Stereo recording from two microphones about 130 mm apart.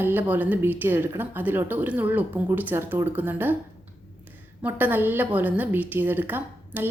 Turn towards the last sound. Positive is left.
turn(degrees=-15)  # may be behind; listen again after turning